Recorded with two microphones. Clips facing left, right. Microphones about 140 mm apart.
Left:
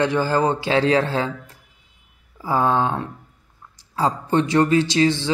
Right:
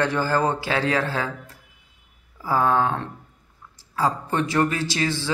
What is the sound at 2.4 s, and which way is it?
Speech, 20° left (ahead or behind).